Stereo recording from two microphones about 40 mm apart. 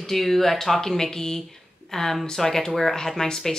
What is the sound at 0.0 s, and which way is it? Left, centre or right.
Speech, centre.